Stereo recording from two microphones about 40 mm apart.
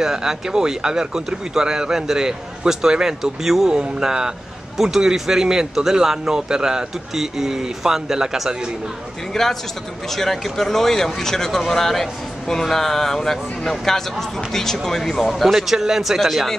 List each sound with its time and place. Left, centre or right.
0.0 s speech: centre
9.3 s speech: centre